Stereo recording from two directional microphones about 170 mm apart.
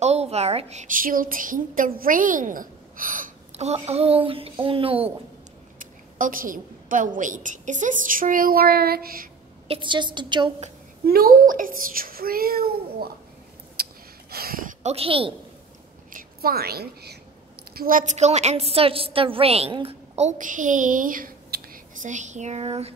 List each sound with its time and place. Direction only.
0.0 s a woman's voice: 40° right (ahead or behind)
5.8 s a woman's voice: 50° right (ahead or behind)
9.7 s a woman's voice: 30° right (ahead or behind)
11.1 s a child's voice: 60° right (ahead or behind)
13.8 s gasp: 65° right (ahead or behind)
14.3 s speech: 60° right (ahead or behind)
14.8 s a woman's voice: 35° right (ahead or behind)
16.1 s a woman's voice: 60° right (ahead or behind)
17.7 s a woman's voice: 55° right (ahead or behind); by 22.9 s 35° right (ahead or behind)